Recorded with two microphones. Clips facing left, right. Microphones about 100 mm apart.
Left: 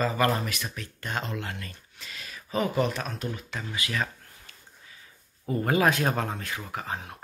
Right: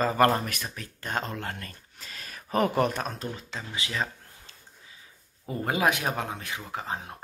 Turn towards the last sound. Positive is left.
turn(degrees=-25)  # may be behind; listen again after turning